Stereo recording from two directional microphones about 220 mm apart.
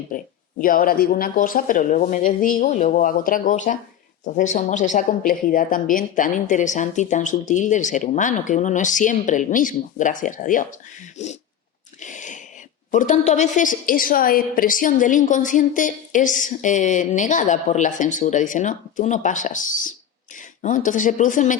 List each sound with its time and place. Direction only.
0.1 s a woman's voice: 40° left (ahead or behind)
11.9 s a sound: 35° left (ahead or behind)
12.9 s a woman's voice: 35° left (ahead or behind)